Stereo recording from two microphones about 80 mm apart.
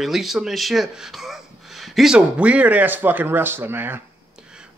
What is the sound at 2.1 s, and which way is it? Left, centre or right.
A man's voice, centre.